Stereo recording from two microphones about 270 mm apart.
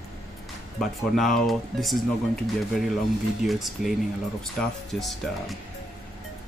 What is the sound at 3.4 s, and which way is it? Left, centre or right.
Speech, centre.